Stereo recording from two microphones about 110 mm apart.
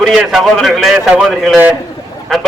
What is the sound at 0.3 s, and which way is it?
A man's voice, centre (ahead or behind).